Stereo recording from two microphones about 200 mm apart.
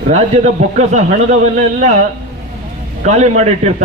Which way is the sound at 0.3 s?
35° right (ahead or behind).